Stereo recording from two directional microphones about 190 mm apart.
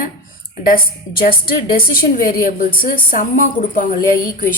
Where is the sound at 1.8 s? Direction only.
50° left (ahead or behind).